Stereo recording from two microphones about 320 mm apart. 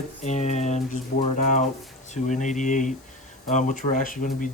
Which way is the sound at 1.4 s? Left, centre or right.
Left.